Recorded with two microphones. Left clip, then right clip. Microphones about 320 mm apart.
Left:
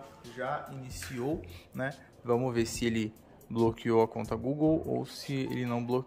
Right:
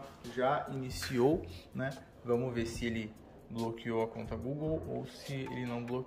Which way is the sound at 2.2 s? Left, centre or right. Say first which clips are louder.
Left 4 dB; centre.